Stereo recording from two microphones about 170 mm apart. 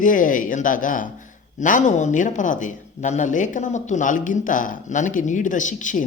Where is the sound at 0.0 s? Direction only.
50° left (ahead or behind).